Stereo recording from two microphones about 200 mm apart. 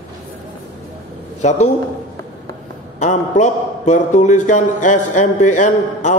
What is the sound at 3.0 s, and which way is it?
A man's voice, 35° left (ahead or behind).